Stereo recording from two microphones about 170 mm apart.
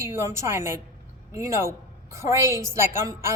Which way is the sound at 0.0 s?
15° right (ahead or behind).